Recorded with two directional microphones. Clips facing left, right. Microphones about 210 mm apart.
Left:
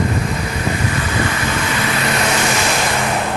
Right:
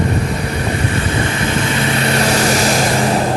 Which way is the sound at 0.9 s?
30° right (ahead or behind).